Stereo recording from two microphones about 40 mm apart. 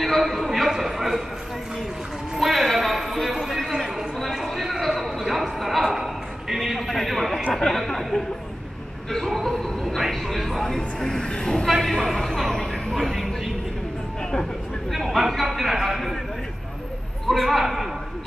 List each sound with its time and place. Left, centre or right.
0.2 s a man's voice: centre
2.5 s a sound: centre
6.9 s a sound: centre
7.5 s speech: centre
9.2 s speech: centre
11.0 s a man's voice: centre
11.8 s a man's voice: centre
12.9 s speech: centre
14.9 s a man's voice: centre
17.3 s speech: centre